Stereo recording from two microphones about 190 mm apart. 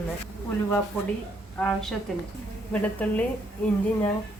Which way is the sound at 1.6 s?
Centre (ahead or behind).